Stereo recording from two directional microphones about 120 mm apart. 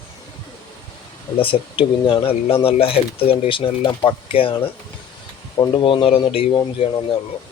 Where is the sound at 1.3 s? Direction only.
45° left (ahead or behind).